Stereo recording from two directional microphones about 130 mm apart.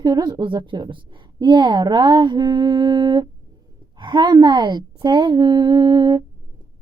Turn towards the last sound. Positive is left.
turn(degrees=-35)  # may be behind; listen again after turning